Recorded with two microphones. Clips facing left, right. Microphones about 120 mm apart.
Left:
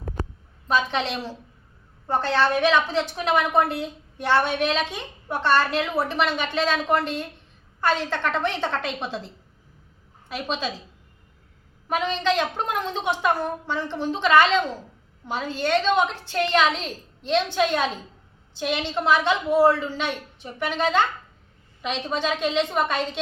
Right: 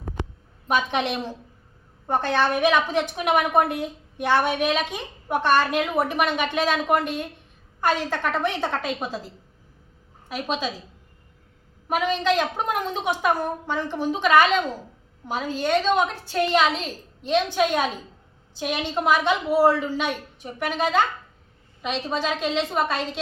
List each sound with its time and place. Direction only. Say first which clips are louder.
0.7 s a woman's voice: even; 15° right (ahead or behind)
11.9 s a woman's voice: right 1 dB; 10° right (ahead or behind)